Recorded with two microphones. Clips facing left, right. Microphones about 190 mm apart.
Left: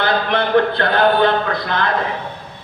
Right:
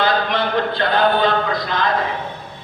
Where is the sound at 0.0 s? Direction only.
60° left (ahead or behind).